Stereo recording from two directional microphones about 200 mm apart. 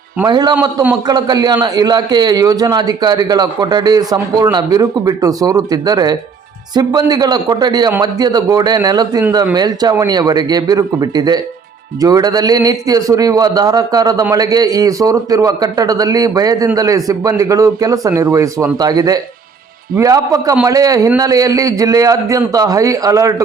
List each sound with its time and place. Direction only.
0.3 s a man's voice: 20° right (ahead or behind)